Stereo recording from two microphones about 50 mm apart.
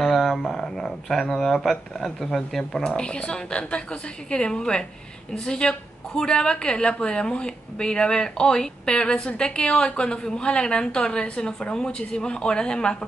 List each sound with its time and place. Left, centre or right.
0.0 s a woman's voice: centre
2.8 s a woman's voice: centre